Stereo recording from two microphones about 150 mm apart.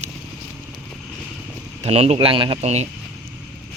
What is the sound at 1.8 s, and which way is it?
Speech, 45° right (ahead or behind).